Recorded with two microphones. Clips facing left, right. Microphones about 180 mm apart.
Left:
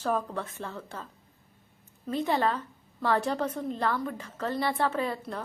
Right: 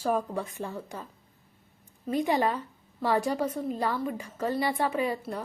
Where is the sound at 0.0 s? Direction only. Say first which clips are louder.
Right 2 dB; 10° right (ahead or behind).